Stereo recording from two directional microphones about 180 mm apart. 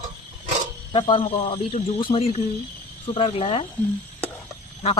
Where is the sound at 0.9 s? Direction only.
30° left (ahead or behind).